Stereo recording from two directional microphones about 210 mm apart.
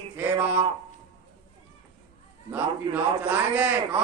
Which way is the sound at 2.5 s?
5° right (ahead or behind).